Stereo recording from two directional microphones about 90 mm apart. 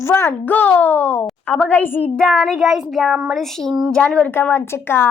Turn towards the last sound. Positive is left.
turn(degrees=25)  # may be behind; listen again after turning